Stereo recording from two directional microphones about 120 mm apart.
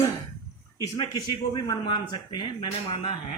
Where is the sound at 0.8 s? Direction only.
35° left (ahead or behind).